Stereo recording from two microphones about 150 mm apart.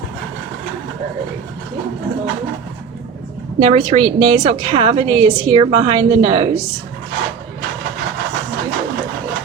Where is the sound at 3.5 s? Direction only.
45° right (ahead or behind).